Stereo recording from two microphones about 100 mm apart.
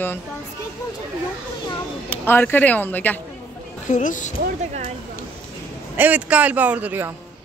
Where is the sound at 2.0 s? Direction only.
20° left (ahead or behind).